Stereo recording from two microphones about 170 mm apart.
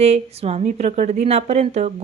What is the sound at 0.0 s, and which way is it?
Speech, 40° right (ahead or behind).